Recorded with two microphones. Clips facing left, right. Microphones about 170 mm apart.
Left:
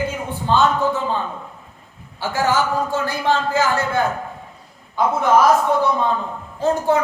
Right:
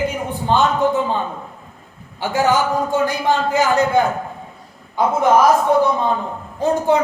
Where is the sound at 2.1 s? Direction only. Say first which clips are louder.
Right 2 dB; 15° right (ahead or behind).